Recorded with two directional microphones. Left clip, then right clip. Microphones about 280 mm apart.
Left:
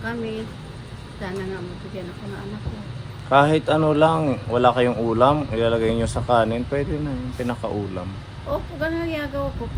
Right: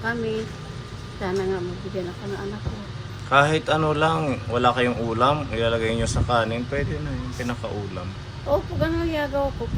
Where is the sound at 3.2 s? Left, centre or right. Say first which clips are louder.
Left 2 dB; centre.